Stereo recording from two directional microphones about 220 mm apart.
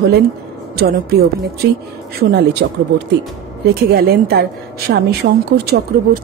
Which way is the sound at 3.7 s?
45° right (ahead or behind).